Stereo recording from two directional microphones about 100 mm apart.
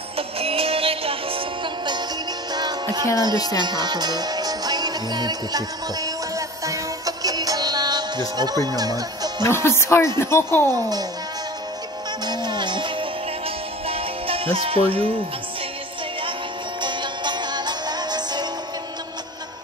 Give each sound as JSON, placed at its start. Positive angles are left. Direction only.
{"t": 0.4, "sound": "music", "side_deg": -75}
{"t": 2.5, "sound": "music", "side_deg": -45}
{"t": 3.2, "sound": "speech", "side_deg": -45}
{"t": 3.5, "sound": "music", "side_deg": -45}
{"t": 6.3, "sound": "music", "side_deg": -35}
{"t": 9.4, "sound": "speech", "side_deg": 25}
{"t": 10.7, "sound": "a child's voice", "side_deg": -40}
{"t": 12.3, "sound": "music", "side_deg": -50}
{"t": 13.8, "sound": "music", "side_deg": -70}
{"t": 16.8, "sound": "music", "side_deg": -50}